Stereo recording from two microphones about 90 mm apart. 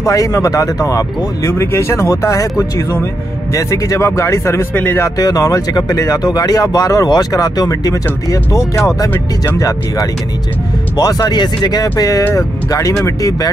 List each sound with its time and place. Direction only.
0.0 s speech: 35° left (ahead or behind)
3.5 s speech: 35° left (ahead or behind)
5.0 s speech: 40° left (ahead or behind)